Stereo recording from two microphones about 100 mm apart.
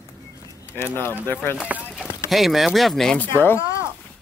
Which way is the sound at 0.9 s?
20° left (ahead or behind).